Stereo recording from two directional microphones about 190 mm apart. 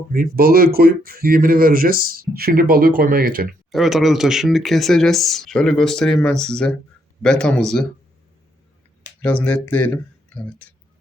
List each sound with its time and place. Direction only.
0.1 s speech: 50° right (ahead or behind)
3.7 s speech: centre (ahead or behind)
9.2 s speech: 5° left (ahead or behind)